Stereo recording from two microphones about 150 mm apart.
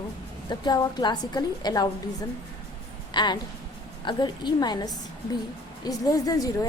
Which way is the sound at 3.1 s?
30° left (ahead or behind).